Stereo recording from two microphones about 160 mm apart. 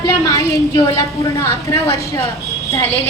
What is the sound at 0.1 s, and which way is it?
A woman's voice, 20° left (ahead or behind).